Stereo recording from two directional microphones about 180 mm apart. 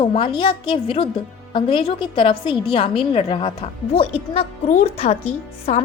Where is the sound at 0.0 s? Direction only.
30° left (ahead or behind).